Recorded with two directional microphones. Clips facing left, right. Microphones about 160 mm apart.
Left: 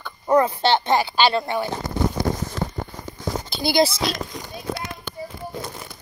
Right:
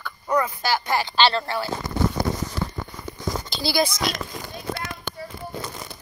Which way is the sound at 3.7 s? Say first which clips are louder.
Left 4 dB; 25° left (ahead or behind).